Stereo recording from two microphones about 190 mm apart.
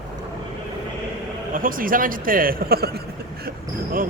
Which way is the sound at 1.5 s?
45° right (ahead or behind).